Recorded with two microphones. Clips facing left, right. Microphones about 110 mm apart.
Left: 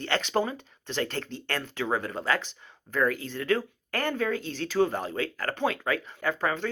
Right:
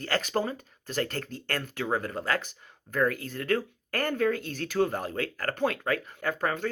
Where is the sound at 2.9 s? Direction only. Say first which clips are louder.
Left 1 dB; 45° right (ahead or behind).